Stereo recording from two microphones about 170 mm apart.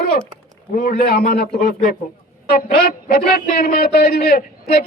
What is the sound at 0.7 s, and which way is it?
A man's voice, 60° left (ahead or behind).